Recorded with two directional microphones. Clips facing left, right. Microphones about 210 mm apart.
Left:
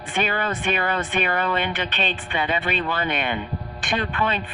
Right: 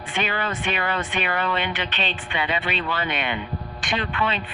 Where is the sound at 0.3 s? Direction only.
45° left (ahead or behind).